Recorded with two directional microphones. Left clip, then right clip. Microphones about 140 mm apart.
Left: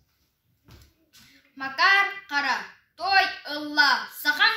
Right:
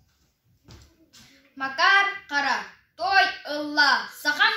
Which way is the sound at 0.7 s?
10° right (ahead or behind).